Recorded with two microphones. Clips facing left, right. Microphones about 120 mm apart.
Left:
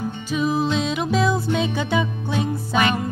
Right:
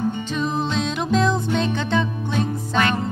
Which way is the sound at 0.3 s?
5° left (ahead or behind).